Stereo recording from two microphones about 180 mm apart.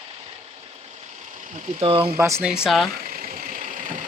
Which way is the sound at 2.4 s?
5° right (ahead or behind).